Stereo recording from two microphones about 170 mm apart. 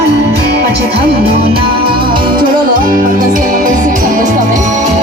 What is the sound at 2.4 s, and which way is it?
Music, 55° right (ahead or behind).